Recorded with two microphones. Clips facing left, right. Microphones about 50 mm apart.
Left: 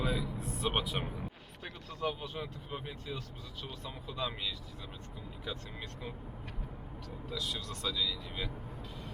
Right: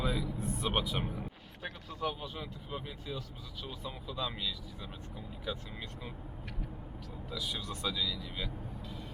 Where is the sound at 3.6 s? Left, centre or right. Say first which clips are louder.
Right 2 dB; centre.